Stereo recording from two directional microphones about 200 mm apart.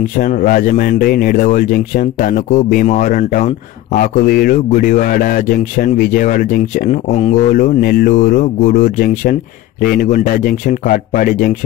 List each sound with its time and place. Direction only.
0.2 s a man's voice: 45° left (ahead or behind)